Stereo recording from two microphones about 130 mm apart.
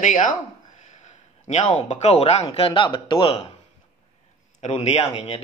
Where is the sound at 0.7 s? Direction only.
70° left (ahead or behind).